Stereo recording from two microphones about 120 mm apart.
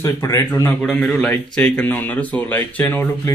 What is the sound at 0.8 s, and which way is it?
A man's voice, 10° left (ahead or behind).